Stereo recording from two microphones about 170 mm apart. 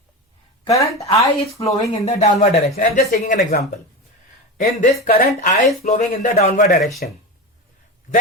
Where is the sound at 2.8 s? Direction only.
50° left (ahead or behind).